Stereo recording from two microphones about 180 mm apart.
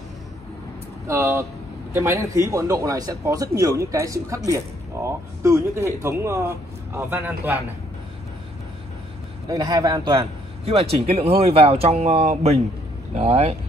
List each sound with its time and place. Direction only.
1.0 s speech: 15° right (ahead or behind)
9.5 s a man's voice: 20° right (ahead or behind)
10.6 s speech: 35° right (ahead or behind)